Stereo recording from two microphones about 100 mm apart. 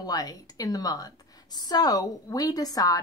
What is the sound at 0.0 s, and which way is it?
Speech, 40° left (ahead or behind).